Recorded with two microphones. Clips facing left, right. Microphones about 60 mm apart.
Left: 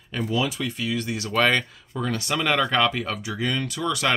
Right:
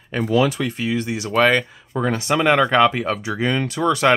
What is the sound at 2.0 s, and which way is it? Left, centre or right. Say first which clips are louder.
Speech: right 6 dB; right.